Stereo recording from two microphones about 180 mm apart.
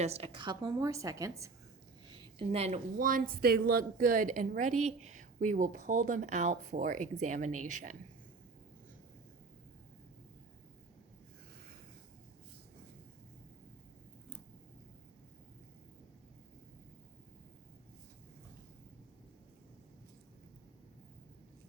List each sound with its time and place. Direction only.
0.0 s a woman's voice: 35° right (ahead or behind); by 1.3 s 15° right (ahead or behind)
2.5 s speech: 35° right (ahead or behind)